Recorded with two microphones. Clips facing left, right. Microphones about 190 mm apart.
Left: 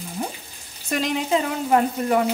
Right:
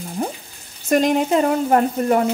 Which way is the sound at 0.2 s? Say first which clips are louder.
Right 5 dB; 45° right (ahead or behind).